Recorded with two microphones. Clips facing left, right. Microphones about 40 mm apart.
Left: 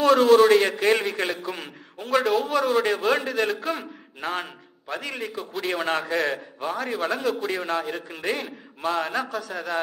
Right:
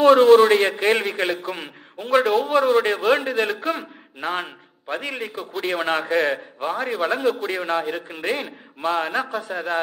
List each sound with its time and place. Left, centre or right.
0.0 s a man's voice: right
7.8 s a man's voice: centre